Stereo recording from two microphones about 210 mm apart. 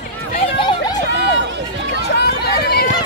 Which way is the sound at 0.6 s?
20° left (ahead or behind).